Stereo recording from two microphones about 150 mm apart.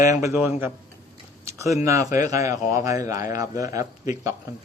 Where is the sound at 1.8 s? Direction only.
20° right (ahead or behind).